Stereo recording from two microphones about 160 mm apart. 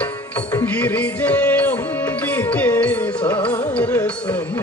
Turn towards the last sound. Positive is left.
turn(degrees=10)  # may be behind; listen again after turning